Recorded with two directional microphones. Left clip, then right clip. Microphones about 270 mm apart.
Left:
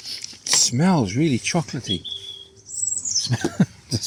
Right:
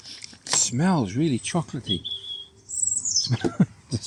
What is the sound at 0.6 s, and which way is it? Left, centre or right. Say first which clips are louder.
Speech: left 4 dB; centre.